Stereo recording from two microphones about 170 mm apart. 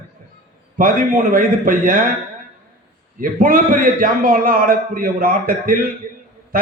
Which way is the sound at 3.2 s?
55° right (ahead or behind).